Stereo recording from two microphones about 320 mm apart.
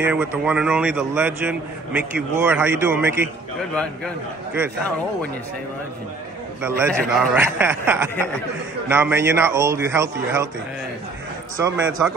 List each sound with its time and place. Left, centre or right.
0.0 s a man's voice: centre
6.9 s a man's voice: centre
7.4 s a man's voice: centre
11.5 s a man's voice: centre